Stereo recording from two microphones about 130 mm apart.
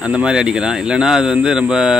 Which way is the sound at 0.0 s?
5° right (ahead or behind).